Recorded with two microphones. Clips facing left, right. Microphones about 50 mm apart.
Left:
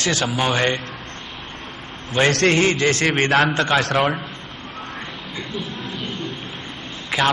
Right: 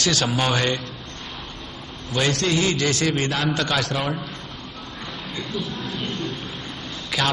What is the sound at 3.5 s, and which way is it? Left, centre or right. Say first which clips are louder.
Speech: left 4 dB; left.